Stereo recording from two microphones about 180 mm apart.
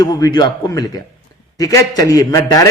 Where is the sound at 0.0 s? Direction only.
20° left (ahead or behind).